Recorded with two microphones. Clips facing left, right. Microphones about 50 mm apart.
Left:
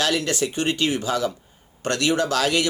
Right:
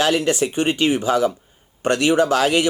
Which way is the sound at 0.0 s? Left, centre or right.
Right.